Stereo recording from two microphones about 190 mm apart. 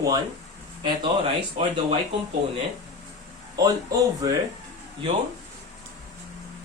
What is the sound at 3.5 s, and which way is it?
Speech, 20° right (ahead or behind).